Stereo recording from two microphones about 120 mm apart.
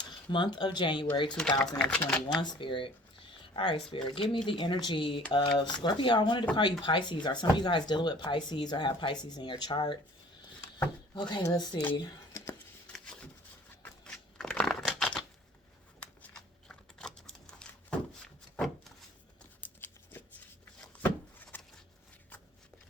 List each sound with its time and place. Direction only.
0.0 s speech: 40° left (ahead or behind)
1.4 s speech: 5° left (ahead or behind)
2.3 s speech: 35° left (ahead or behind)
11.1 s speech: 40° left (ahead or behind)
14.0 s a sound: 10° left (ahead or behind)
16.0 s typing: 10° left (ahead or behind)
19.6 s a sound: 15° left (ahead or behind)